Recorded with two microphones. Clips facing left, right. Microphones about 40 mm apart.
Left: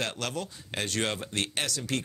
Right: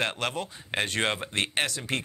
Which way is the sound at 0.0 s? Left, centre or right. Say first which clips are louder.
Right 3 dB; right.